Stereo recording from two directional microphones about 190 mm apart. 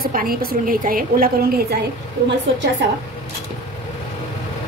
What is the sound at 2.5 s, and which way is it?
Speech, 70° right (ahead or behind).